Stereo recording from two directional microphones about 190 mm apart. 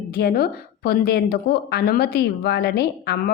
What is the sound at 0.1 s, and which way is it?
A woman's voice, 55° left (ahead or behind).